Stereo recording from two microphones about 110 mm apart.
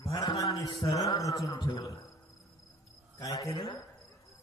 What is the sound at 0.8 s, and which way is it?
Speech, 30° left (ahead or behind).